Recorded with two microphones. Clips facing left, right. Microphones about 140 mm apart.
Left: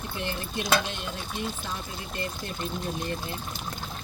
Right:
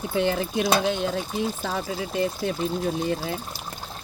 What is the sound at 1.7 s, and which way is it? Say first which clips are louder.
Speech: right 8 dB; 90° right.